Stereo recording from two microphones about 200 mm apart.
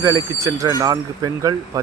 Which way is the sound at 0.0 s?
15° right (ahead or behind).